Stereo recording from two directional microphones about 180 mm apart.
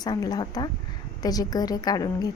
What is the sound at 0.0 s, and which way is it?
A woman's voice, 20° left (ahead or behind).